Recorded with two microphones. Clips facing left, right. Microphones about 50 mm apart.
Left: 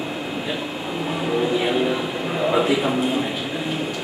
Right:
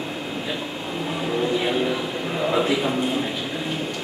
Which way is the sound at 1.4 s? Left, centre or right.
Centre.